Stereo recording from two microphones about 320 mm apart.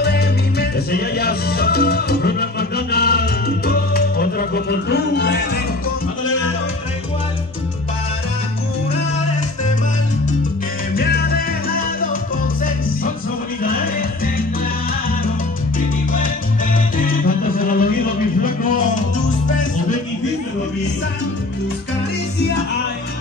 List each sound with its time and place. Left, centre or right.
0.0 s music: left
11.0 s music: left
13.6 s music: left
16.7 s music: left